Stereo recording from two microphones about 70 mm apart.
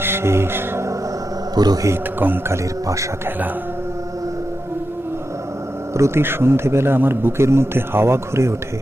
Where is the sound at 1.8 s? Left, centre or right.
Right.